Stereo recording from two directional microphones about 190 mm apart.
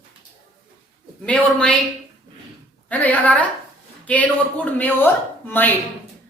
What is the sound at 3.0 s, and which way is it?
A woman's voice, 10° left (ahead or behind).